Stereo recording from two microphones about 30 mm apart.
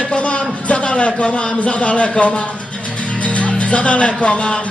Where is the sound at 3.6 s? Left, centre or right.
Left.